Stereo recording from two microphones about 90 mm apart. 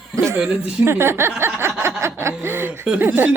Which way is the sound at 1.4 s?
25° right (ahead or behind).